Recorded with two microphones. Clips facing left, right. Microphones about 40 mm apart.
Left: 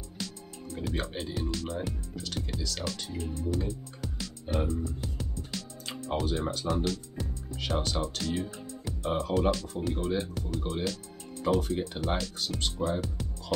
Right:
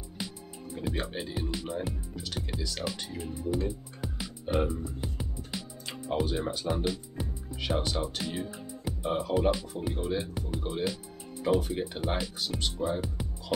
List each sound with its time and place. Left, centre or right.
0.2 s music: centre
0.8 s speech: centre
1.9 s music: centre
5.9 s speech: centre
12.4 s speech: centre